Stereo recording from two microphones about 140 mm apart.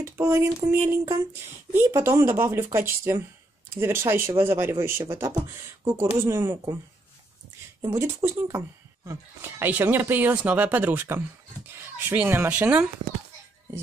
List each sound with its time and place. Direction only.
0.0 s speech: 20° right (ahead or behind)
7.9 s speech: 15° right (ahead or behind)